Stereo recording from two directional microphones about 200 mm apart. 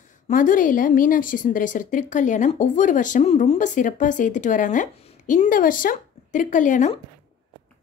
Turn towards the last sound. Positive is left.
turn(degrees=40)  # may be behind; listen again after turning